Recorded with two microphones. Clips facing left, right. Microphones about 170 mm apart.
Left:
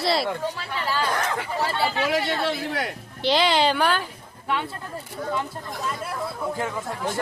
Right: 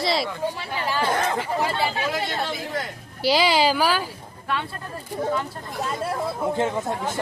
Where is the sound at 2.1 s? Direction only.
70° left (ahead or behind).